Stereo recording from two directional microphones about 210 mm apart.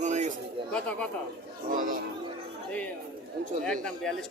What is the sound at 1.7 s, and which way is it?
Speech, 40° right (ahead or behind).